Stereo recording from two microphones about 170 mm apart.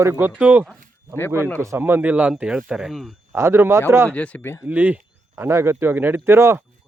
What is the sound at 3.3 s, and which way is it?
Speech, 15° right (ahead or behind).